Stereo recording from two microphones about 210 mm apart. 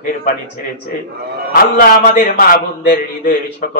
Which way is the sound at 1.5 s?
40° left (ahead or behind).